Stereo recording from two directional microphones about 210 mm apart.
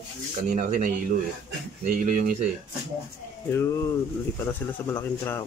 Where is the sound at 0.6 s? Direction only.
40° right (ahead or behind).